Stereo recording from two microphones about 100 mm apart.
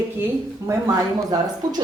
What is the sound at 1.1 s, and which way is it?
Speech, 40° right (ahead or behind).